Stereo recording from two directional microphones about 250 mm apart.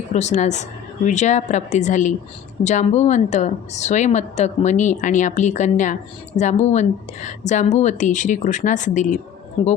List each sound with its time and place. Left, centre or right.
0.1 s a woman's voice: left